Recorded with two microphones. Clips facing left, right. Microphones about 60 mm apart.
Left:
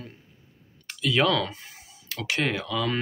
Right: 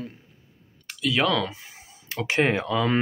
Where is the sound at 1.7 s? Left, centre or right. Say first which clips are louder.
Right 5 dB; right.